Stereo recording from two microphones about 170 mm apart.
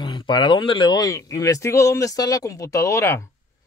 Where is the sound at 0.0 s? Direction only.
30° left (ahead or behind).